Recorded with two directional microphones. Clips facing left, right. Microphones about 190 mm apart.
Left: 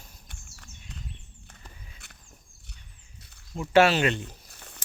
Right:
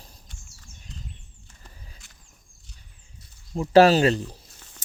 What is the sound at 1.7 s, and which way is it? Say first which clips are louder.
Walk: right 1 dB; 35° right (ahead or behind).